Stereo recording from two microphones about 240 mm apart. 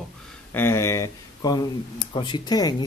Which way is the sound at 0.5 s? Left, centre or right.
Centre.